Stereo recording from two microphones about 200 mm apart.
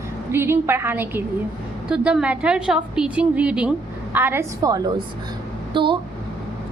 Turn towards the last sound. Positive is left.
turn(degrees=-25)  # may be behind; listen again after turning